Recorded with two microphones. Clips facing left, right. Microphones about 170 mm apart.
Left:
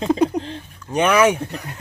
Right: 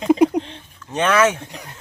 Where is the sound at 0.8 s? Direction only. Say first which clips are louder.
Left 1 dB; 10° left (ahead or behind).